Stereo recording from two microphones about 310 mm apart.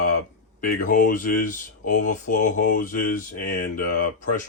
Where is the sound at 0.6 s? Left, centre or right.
Left.